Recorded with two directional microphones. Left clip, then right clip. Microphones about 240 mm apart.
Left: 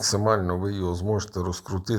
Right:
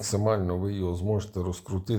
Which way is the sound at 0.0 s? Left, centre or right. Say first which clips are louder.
Left 4 dB; centre.